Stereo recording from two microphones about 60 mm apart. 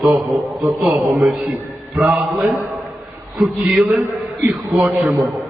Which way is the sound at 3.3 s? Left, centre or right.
Centre.